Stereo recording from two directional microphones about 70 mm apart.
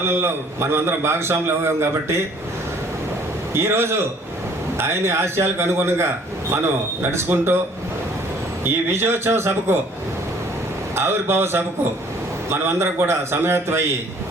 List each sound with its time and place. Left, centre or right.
0.0 s a man's voice: right
3.5 s a man's voice: right
8.9 s a man's voice: right
10.9 s a man's voice: right